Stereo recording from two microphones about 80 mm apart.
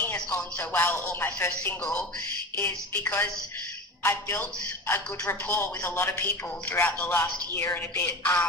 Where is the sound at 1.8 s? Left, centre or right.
Centre.